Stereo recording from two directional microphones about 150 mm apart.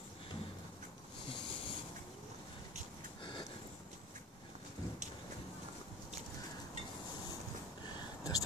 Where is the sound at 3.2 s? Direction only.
35° left (ahead or behind).